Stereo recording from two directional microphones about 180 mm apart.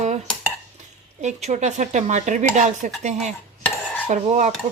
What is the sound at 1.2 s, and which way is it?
Speech, 40° right (ahead or behind).